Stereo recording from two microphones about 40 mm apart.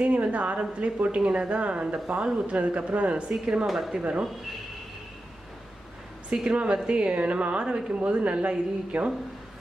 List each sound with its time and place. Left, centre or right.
0.0 s a woman's voice: right
3.6 s speech: centre
4.0 s a woman's voice: right
6.5 s a woman's voice: right
7.2 s a woman's voice: right